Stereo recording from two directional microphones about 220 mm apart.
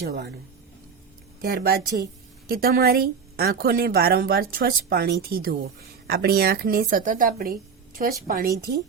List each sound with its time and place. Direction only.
1.4 s a woman's voice: 45° right (ahead or behind)